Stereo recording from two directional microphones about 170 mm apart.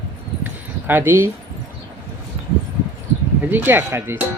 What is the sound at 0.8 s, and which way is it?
Speech, 10° right (ahead or behind).